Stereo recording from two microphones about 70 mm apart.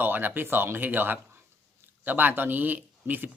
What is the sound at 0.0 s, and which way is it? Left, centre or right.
Speech, right.